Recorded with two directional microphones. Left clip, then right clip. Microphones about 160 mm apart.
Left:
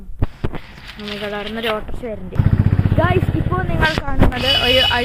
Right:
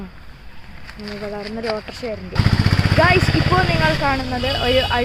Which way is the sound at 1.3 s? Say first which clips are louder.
Left 3 dB; 5° left (ahead or behind).